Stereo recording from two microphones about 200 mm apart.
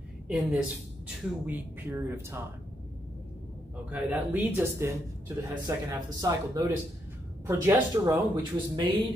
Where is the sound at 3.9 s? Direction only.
10° right (ahead or behind).